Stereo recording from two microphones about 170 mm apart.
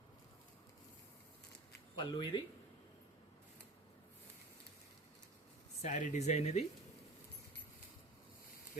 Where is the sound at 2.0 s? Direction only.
25° left (ahead or behind).